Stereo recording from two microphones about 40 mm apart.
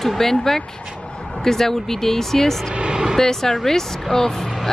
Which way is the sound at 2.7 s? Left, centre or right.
Right.